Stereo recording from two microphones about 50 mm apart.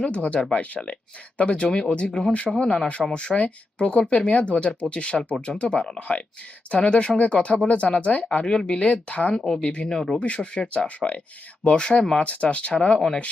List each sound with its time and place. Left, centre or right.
0.0 s speech: left
9.3 s speech: centre
10.2 s speech: left
12.2 s speech: left